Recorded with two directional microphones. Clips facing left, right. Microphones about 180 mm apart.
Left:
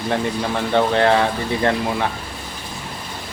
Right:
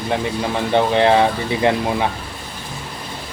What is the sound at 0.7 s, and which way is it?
Speech, 15° right (ahead or behind).